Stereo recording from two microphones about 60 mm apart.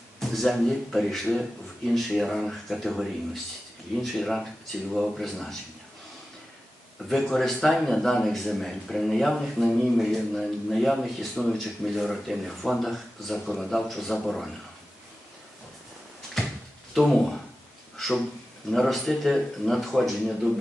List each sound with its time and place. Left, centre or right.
0.2 s a man's voice: centre
7.1 s a man's voice: centre
9.4 s a man's voice: centre
16.9 s a man's voice: centre
17.9 s a sound: centre
18.7 s a man's voice: centre